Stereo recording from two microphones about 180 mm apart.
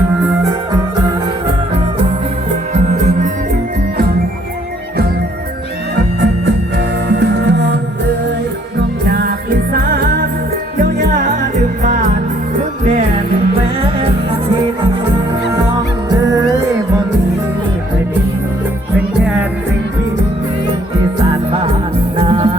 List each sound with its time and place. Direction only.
2.7 s music: 40° right (ahead or behind)
7.1 s music: 65° right (ahead or behind)
9.0 s music: 60° right (ahead or behind)
21.2 s music: 30° right (ahead or behind)